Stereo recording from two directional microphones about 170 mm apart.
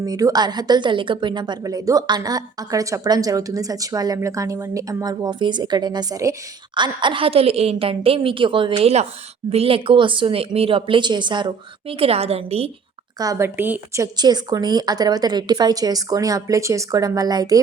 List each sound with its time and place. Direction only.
0.0 s a woman's voice: 20° right (ahead or behind); by 12.7 s 35° right (ahead or behind)
13.1 s a woman's voice: 20° right (ahead or behind)